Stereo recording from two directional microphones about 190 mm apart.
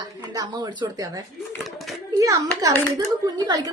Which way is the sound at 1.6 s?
Centre (ahead or behind).